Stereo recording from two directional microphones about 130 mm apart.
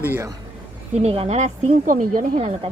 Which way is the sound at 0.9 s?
50° right (ahead or behind).